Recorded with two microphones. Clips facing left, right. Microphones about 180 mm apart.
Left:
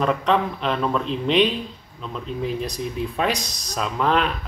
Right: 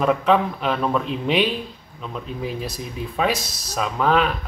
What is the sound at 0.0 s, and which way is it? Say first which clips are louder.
A man's voice: right 2 dB; 5° right (ahead or behind).